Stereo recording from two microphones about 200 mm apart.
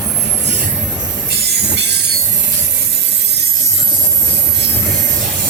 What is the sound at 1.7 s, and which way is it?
Train, 60° right (ahead or behind).